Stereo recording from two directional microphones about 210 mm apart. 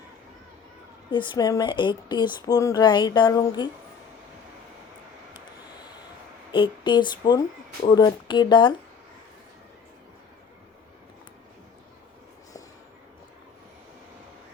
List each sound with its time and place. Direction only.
1.1 s speech: 20° left (ahead or behind)
6.5 s speech: 25° left (ahead or behind)